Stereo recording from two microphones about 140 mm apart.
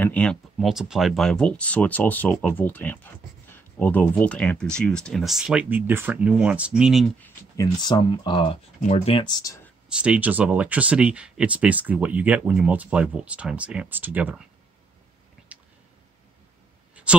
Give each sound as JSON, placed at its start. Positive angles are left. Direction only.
{"t": 0.0, "sound": "speech", "side_deg": 10}
{"t": 7.2, "sound": "speech", "side_deg": 20}
{"t": 8.8, "sound": "speech", "side_deg": 50}
{"t": 9.2, "sound": "speech", "side_deg": 30}
{"t": 9.8, "sound": "speech", "side_deg": -5}
{"t": 17.0, "sound": "a sound", "side_deg": -10}